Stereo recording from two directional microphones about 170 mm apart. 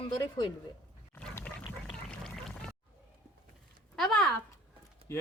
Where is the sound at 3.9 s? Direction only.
Centre (ahead or behind).